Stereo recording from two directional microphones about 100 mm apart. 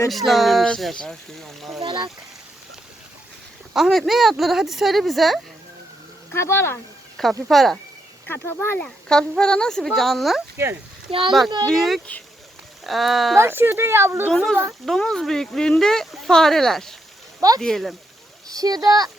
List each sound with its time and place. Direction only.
0.1 s speech: centre (ahead or behind)
1.8 s speech: 55° right (ahead or behind)
3.8 s speech: centre (ahead or behind)
6.3 s speech: 25° left (ahead or behind)
7.4 s speech: centre (ahead or behind)
8.3 s speech: 20° left (ahead or behind)
9.0 s speech: 5° left (ahead or behind)
13.3 s a child's voice: 25° right (ahead or behind)
14.3 s a child's voice: 5° left (ahead or behind)
18.4 s speech: 40° right (ahead or behind)